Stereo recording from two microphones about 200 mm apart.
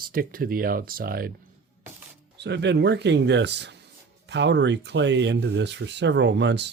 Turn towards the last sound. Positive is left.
turn(degrees=-60)  # may be behind; listen again after turning